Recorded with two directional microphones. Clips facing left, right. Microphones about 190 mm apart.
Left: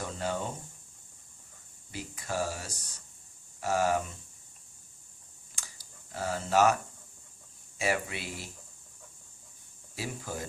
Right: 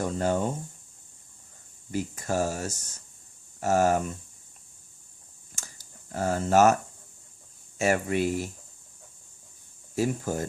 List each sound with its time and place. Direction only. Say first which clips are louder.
0.0 s speech: right 8 dB; 45° right (ahead or behind)
1.9 s speech: right 7 dB; 45° right (ahead or behind)
5.5 s a sound: right 4 dB; 45° right (ahead or behind)
7.8 s speech: right 7 dB; 45° right (ahead or behind)
9.9 s speech: right 10 dB; 45° right (ahead or behind)